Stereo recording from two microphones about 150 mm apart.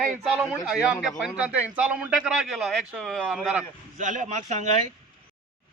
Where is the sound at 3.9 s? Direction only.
55° right (ahead or behind).